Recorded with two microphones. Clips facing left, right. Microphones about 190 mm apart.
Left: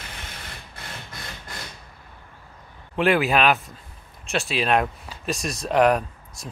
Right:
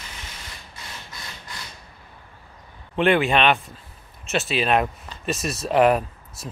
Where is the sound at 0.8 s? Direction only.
55° left (ahead or behind).